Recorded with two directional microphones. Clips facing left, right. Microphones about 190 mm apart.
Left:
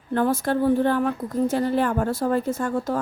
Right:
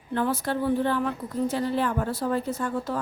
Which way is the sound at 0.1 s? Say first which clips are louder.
Left 5 dB; 45° left (ahead or behind).